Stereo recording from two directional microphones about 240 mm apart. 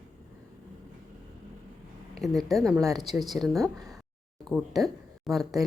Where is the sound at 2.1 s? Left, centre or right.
Centre.